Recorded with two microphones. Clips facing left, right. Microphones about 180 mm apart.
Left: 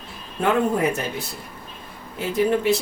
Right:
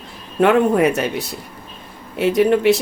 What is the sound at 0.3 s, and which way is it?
Speech, 70° right (ahead or behind).